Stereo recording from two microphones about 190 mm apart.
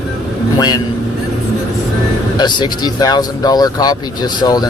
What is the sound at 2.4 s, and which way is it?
Speech, 25° left (ahead or behind).